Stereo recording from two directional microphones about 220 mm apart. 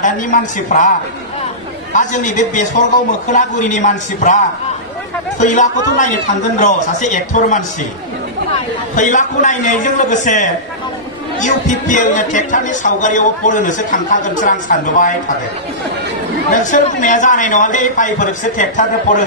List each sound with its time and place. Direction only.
0.0 s speech: 35° left (ahead or behind)
2.0 s speech: 35° left (ahead or behind)
5.4 s speech: 35° left (ahead or behind)
8.9 s speech: 35° left (ahead or behind)
16.5 s speech: 35° left (ahead or behind)